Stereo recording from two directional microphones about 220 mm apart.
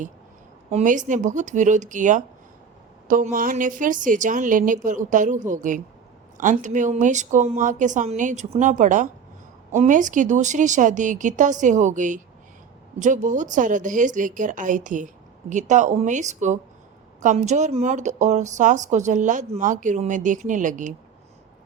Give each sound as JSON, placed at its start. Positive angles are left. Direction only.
{"t": 0.7, "sound": "speech", "side_deg": -30}